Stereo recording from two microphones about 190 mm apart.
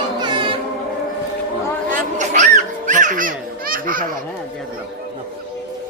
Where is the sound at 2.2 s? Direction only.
40° right (ahead or behind).